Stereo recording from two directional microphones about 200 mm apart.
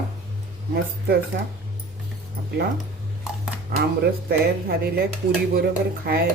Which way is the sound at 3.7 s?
50° right (ahead or behind).